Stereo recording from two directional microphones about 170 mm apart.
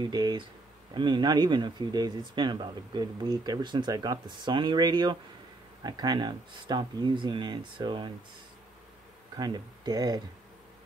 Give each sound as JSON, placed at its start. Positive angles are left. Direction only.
{"t": 0.0, "sound": "speech", "side_deg": -25}
{"t": 9.4, "sound": "speech", "side_deg": -25}